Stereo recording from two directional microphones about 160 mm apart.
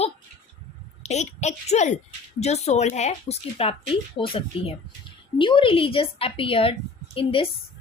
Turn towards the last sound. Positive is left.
turn(degrees=35)  # may be behind; listen again after turning